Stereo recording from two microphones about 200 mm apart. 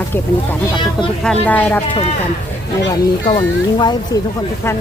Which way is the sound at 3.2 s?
20° left (ahead or behind).